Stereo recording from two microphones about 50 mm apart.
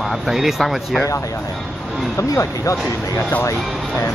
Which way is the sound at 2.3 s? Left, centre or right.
Left.